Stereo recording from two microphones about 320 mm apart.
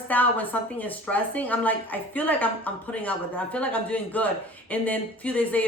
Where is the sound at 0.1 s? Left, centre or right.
Centre.